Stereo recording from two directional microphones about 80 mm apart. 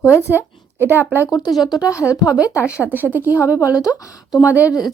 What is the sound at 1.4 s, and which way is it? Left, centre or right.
Speech, left.